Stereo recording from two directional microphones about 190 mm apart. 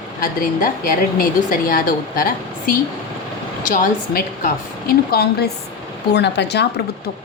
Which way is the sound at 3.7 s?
45° left (ahead or behind).